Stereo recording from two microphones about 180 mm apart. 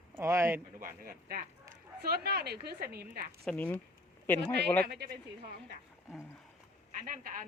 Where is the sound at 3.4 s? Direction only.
5° left (ahead or behind).